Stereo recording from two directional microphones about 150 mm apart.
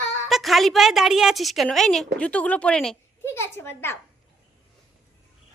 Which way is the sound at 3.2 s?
15° left (ahead or behind).